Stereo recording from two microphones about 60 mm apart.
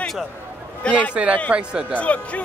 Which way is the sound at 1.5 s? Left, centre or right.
Centre.